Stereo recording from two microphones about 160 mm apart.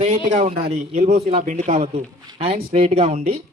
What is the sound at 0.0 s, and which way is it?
Speech, 45° right (ahead or behind).